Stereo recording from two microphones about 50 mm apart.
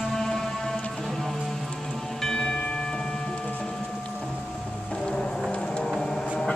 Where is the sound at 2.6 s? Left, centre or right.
Centre.